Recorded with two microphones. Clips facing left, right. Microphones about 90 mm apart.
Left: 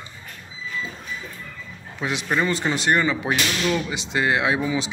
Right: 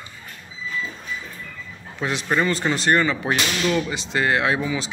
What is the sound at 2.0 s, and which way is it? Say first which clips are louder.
Speech: right 1 dB; 10° left (ahead or behind).